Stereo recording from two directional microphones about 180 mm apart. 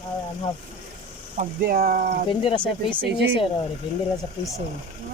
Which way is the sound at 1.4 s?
55° right (ahead or behind).